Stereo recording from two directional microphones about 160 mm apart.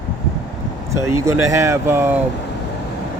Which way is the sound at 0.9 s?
20° right (ahead or behind).